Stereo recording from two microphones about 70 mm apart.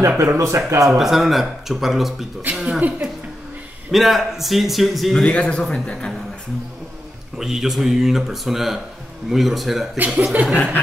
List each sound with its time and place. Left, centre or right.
0.2 s speech: right
0.9 s speech: centre
5.2 s speech: centre
7.3 s speech: centre
9.9 s speech: centre
10.5 s speech: centre